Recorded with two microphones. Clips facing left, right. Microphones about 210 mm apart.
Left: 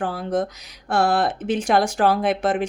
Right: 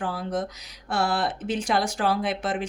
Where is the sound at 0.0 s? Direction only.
50° left (ahead or behind).